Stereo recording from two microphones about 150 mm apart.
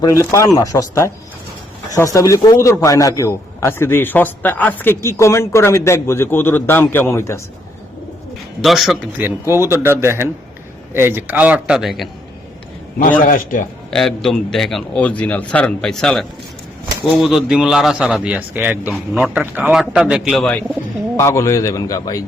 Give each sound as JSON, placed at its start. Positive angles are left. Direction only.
{"t": 0.3, "sound": "a man's voice", "side_deg": 20}
{"t": 2.1, "sound": "a man's voice", "side_deg": 20}
{"t": 8.6, "sound": "a man's voice", "side_deg": 0}
{"t": 9.1, "sound": "a man's voice", "side_deg": -15}
{"t": 13.0, "sound": "a man's voice", "side_deg": 65}
{"t": 13.9, "sound": "a man's voice", "side_deg": 0}
{"t": 20.4, "sound": "a man's voice", "side_deg": 10}